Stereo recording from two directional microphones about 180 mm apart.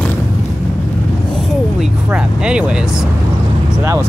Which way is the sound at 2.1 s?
5° right (ahead or behind).